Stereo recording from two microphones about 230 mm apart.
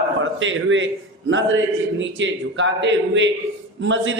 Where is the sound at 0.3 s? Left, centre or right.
Right.